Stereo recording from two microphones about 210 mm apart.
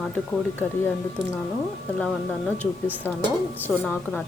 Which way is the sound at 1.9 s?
5° left (ahead or behind).